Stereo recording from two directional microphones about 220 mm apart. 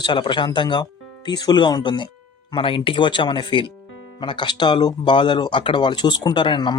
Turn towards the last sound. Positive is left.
turn(degrees=20)  # may be behind; listen again after turning